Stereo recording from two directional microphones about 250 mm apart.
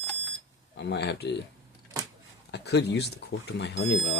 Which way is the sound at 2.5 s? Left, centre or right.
Left.